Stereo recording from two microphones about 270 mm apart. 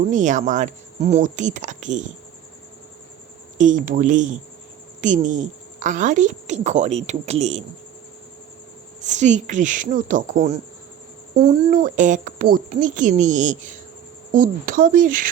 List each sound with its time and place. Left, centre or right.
0.1 s a woman's voice: right
3.6 s a woman's voice: right
9.0 s a woman's voice: right